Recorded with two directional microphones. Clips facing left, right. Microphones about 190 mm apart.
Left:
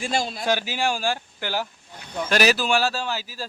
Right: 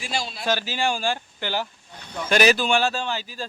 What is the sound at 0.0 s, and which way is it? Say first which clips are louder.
Speech: left 4 dB; 50° left (ahead or behind).